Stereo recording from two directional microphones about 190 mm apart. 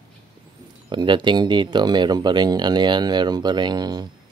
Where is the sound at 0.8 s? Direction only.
25° right (ahead or behind).